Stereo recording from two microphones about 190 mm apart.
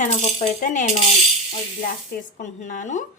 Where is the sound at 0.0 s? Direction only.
35° left (ahead or behind).